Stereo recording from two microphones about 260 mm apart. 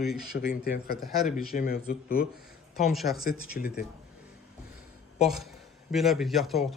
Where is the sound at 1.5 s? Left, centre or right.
Left.